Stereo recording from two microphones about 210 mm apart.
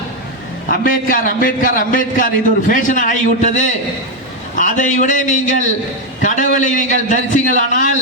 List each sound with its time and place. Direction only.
0.9 s a man's voice: 40° left (ahead or behind)